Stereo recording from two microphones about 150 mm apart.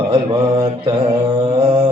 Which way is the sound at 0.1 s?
35° right (ahead or behind).